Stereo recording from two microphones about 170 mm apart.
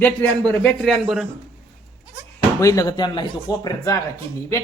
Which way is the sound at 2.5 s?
20° left (ahead or behind).